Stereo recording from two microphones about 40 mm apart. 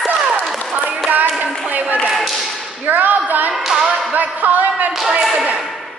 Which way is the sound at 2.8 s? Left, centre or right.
Right.